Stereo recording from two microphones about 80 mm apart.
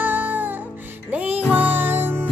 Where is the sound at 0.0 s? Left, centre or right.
Right.